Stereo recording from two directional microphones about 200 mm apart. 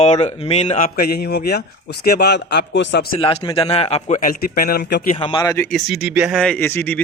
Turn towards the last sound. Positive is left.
turn(degrees=10)  # may be behind; listen again after turning